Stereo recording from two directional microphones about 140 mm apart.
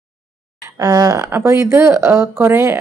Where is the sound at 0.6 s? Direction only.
25° right (ahead or behind).